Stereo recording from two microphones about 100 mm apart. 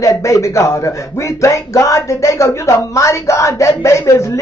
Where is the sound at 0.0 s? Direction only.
30° left (ahead or behind).